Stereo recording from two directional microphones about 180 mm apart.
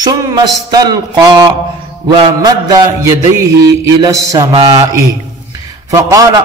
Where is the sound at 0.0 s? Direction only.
20° right (ahead or behind).